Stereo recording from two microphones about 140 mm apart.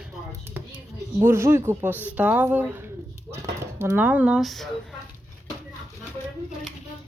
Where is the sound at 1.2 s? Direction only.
20° right (ahead or behind); by 4.7 s centre (ahead or behind).